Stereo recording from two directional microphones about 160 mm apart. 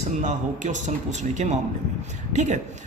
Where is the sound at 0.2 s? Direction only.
50° right (ahead or behind).